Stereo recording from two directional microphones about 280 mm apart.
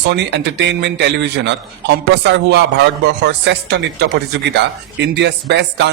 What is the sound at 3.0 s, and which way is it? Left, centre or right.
Speech, right.